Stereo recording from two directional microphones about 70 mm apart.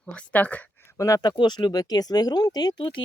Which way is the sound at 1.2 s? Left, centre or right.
Left.